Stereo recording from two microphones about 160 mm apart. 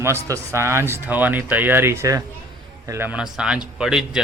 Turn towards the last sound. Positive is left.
turn(degrees=-5)  # may be behind; listen again after turning